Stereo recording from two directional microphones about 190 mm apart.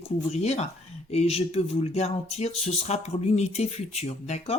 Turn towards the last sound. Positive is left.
turn(degrees=35)  # may be behind; listen again after turning